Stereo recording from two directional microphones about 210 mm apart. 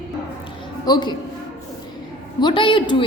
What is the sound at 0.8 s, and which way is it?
Speech, 20° left (ahead or behind).